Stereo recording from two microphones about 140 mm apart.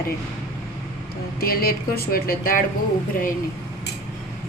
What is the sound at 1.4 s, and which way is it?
A woman's voice, 90° left.